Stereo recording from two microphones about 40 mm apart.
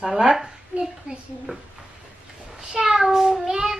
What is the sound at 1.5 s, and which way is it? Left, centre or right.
Speech, right.